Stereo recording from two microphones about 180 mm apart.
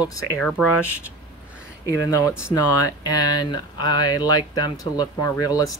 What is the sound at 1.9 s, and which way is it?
Speech, 15° left (ahead or behind).